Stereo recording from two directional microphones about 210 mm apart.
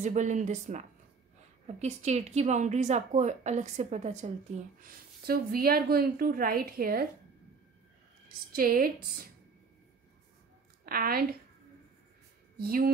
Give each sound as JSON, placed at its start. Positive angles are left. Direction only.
{"t": 0.0, "sound": "a woman's voice", "side_deg": -35}
{"t": 4.8, "sound": "a woman's voice", "side_deg": -45}
{"t": 8.5, "sound": "a woman's voice", "side_deg": -45}
{"t": 10.9, "sound": "a woman's voice", "side_deg": -45}
{"t": 12.5, "sound": "speech", "side_deg": -45}